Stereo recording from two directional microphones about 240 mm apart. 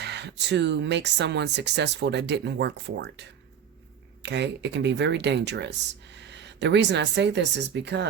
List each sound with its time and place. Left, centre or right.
0.0 s speech: right